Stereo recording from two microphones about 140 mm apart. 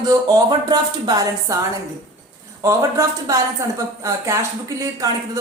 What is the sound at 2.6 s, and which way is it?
A woman's voice, 25° right (ahead or behind).